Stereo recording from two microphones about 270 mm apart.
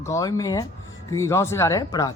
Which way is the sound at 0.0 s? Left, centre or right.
Centre.